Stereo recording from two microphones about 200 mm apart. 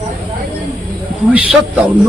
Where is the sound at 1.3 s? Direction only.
5° right (ahead or behind).